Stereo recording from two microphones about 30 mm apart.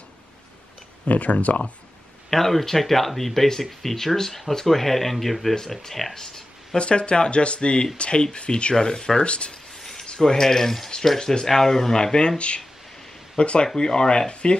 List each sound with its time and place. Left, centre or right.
1.0 s speech: left
2.3 s speech: centre
5.6 s speech: centre
6.1 s a sound: centre
6.8 s speech: left
8.7 s speech: centre
9.2 s speech: left
9.8 s a sound: centre
10.0 s a sound: left
10.3 s speech: centre
11.1 s speech: left
12.0 s speech: left
12.4 s speech: left
14.3 s speech: left